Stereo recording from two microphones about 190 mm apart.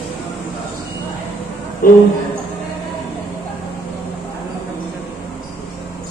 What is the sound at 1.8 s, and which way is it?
Speech, 50° left (ahead or behind).